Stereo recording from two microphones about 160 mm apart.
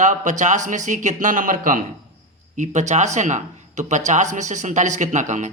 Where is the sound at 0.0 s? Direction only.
50° right (ahead or behind).